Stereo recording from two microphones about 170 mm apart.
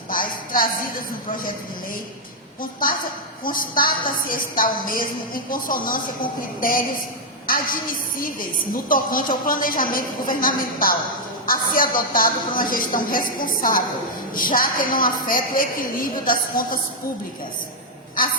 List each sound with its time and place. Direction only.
0.1 s a woman's voice: 55° left (ahead or behind)
3.4 s a woman's voice: 55° left (ahead or behind)